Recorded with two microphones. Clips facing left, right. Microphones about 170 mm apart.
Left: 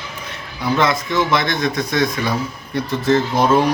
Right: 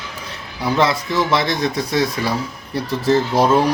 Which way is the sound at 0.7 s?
30° right (ahead or behind).